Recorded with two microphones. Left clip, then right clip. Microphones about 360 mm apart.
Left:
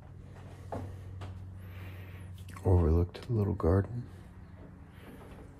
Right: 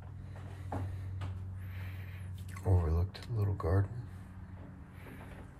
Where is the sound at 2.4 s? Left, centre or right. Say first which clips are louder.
Left 7 dB; left.